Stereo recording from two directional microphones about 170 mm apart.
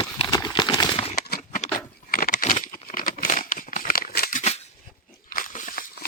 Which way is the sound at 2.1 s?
60° left (ahead or behind).